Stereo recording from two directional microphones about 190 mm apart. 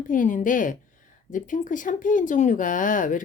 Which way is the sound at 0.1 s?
45° left (ahead or behind).